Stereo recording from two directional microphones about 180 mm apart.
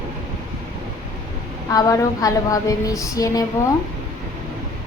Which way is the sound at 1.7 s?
20° left (ahead or behind).